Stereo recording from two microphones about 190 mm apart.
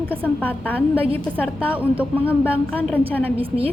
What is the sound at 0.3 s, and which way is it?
Speech, 10° left (ahead or behind).